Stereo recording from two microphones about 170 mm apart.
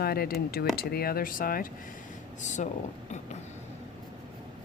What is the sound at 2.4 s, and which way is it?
Speech, 45° left (ahead or behind).